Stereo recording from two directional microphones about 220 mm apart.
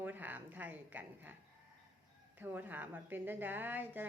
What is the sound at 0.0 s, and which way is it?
A woman's voice, 10° right (ahead or behind).